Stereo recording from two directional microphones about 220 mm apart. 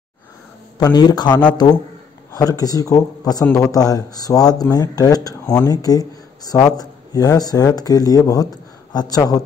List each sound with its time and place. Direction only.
0.7 s a man's voice: 20° left (ahead or behind)